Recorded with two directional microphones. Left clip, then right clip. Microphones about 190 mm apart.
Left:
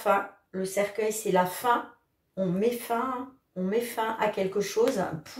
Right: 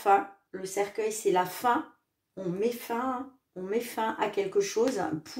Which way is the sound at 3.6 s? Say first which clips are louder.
Left 2 dB; 40° right (ahead or behind).